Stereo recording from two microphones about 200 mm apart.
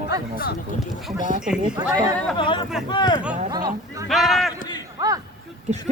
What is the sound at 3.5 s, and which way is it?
Speech, 20° right (ahead or behind).